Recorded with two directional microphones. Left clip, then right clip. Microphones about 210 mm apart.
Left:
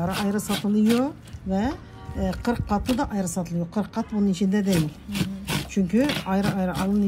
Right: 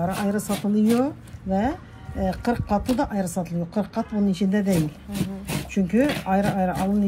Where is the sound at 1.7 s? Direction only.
Centre (ahead or behind).